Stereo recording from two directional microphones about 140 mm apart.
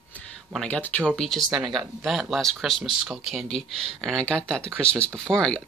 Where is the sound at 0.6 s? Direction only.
10° left (ahead or behind).